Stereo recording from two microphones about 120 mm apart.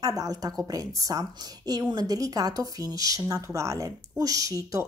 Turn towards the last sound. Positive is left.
turn(degrees=-30)  # may be behind; listen again after turning